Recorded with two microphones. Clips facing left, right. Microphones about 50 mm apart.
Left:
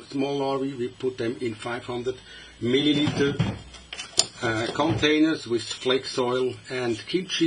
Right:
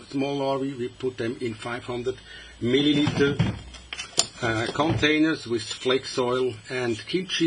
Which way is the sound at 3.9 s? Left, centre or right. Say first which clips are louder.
Even; right.